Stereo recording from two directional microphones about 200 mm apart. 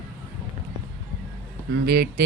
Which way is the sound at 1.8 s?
50° right (ahead or behind).